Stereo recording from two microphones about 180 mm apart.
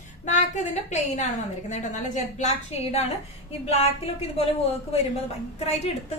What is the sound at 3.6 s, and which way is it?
Speech, 35° left (ahead or behind).